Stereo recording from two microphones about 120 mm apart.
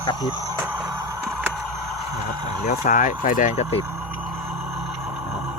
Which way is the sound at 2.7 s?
90° left.